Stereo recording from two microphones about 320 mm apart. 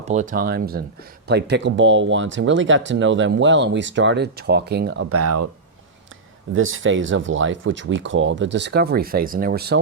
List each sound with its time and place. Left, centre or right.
0.0 s speech: right
6.5 s speech: right